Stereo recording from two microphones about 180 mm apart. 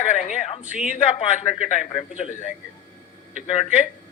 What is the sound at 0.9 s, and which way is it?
A man's voice, 45° left (ahead or behind).